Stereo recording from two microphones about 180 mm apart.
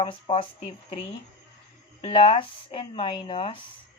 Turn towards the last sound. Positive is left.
turn(degrees=30)  # may be behind; listen again after turning